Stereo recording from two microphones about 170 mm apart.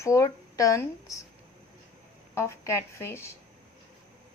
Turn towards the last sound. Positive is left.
turn(degrees=15)  # may be behind; listen again after turning